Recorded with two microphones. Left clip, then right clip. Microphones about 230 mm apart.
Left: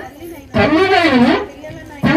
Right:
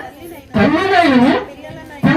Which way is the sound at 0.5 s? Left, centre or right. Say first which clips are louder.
Left 1 dB; left.